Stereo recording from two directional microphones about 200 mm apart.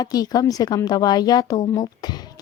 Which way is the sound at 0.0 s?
20° left (ahead or behind).